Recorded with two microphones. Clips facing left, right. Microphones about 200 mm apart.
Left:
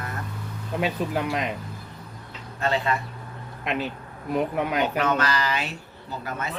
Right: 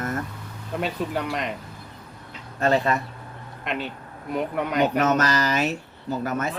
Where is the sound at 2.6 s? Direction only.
45° right (ahead or behind).